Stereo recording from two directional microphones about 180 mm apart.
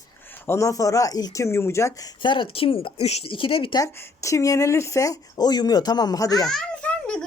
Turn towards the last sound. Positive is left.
turn(degrees=5)  # may be behind; listen again after turning